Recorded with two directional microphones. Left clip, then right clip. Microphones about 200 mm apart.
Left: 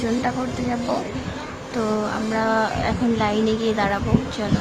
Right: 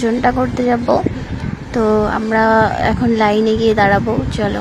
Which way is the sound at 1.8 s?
25° right (ahead or behind).